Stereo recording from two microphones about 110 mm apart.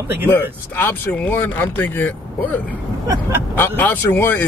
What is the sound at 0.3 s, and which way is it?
Speech, 20° left (ahead or behind).